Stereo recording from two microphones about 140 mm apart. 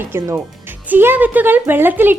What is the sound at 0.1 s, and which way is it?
Speech, 15° right (ahead or behind).